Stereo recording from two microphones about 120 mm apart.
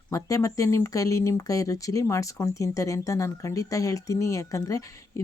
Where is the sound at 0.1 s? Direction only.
25° left (ahead or behind).